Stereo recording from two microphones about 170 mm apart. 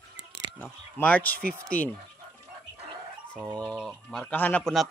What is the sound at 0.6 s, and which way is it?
Speech, 10° left (ahead or behind).